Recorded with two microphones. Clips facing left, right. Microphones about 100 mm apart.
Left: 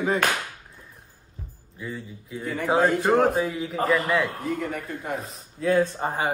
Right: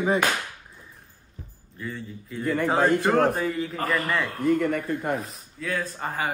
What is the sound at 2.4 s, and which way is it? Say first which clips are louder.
Speech: even; 55° right (ahead or behind).